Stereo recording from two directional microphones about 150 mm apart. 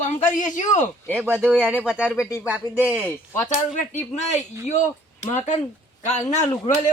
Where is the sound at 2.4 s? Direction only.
10° right (ahead or behind).